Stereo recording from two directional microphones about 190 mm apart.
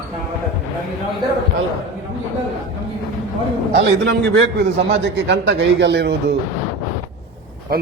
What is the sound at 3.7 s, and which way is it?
A man's voice, 65° right (ahead or behind).